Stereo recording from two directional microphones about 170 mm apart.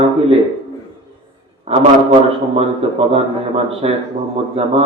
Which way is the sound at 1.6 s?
35° right (ahead or behind).